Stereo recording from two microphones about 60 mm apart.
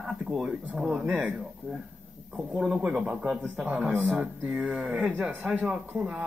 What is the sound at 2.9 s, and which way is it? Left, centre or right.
Speech, centre.